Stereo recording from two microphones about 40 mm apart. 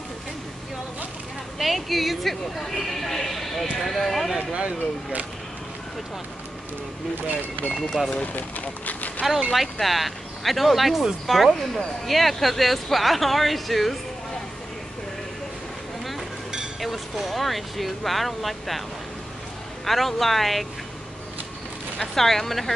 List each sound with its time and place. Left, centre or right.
1.6 s speech: centre
4.5 s speech: right
7.7 s speech: centre
8.3 s speech: left
9.5 s speech: centre
16.8 s speech: centre
19.8 s speech: centre
22.1 s speech: centre